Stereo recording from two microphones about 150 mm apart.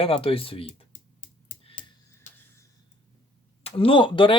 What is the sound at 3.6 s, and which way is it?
Speech, 40° left (ahead or behind).